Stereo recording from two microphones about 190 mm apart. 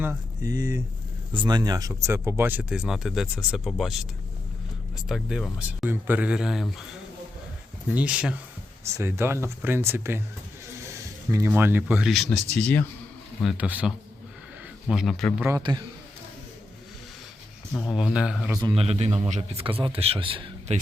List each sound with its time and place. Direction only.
0.0 s speech: 15° right (ahead or behind)
5.0 s speech: centre (ahead or behind)
7.9 s speech: 5° right (ahead or behind)
13.4 s speech: 5° right (ahead or behind)
15.4 s a man's voice: 20° right (ahead or behind)
17.9 s speech: 5° right (ahead or behind)
18.6 s a man's voice: 30° right (ahead or behind)